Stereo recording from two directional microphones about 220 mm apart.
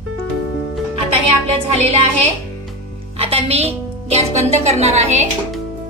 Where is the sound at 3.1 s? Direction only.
25° right (ahead or behind).